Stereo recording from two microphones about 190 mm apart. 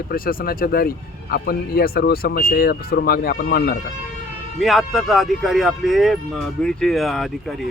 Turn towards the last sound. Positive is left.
turn(degrees=0)  # may be behind; listen again after turning